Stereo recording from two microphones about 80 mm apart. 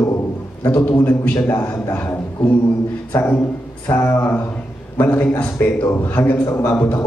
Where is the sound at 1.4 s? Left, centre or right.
Left.